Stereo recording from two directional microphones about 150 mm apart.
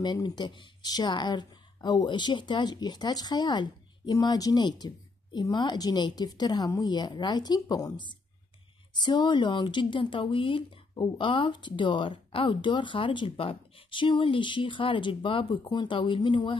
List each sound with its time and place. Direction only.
0.0 s speech: 30° left (ahead or behind)